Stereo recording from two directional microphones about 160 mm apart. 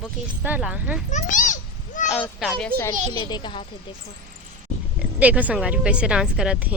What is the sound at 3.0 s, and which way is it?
Speech, 40° right (ahead or behind).